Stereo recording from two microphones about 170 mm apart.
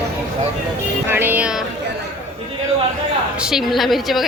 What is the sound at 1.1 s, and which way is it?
Speech, 10° right (ahead or behind).